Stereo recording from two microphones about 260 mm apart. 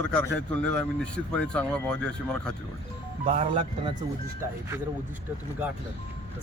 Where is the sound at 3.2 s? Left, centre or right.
Right.